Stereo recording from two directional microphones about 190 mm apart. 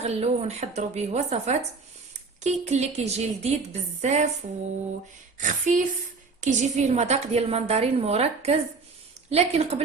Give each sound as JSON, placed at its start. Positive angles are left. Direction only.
{"t": 0.0, "sound": "a woman's voice", "side_deg": -35}
{"t": 5.4, "sound": "a woman's voice", "side_deg": -40}